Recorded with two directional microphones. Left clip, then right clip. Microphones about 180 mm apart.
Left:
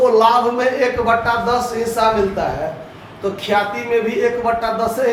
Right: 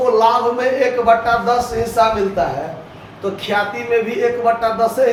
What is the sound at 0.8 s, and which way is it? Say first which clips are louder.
Speech: right 2 dB; 10° right (ahead or behind).